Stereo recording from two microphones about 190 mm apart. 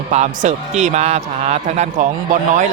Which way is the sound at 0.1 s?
35° right (ahead or behind).